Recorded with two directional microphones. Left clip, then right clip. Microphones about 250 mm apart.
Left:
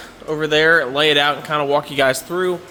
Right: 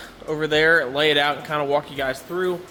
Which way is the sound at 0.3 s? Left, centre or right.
Centre.